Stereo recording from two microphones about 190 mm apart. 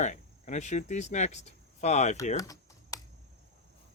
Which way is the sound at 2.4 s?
20° left (ahead or behind).